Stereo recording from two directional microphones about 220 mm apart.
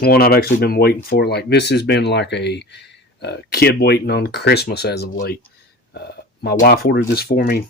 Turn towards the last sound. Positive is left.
turn(degrees=45)  # may be behind; listen again after turning